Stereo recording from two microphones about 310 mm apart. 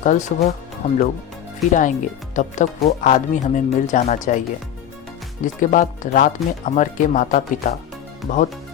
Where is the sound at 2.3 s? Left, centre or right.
Left.